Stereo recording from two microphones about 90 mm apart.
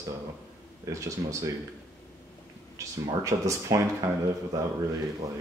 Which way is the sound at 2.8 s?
35° right (ahead or behind).